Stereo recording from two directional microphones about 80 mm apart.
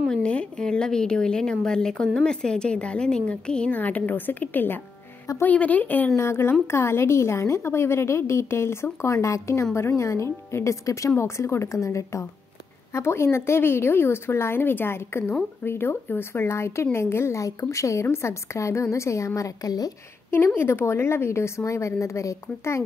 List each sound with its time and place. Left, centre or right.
0.1 s a woman's voice: centre
6.1 s a woman's voice: left
20.2 s a woman's voice: left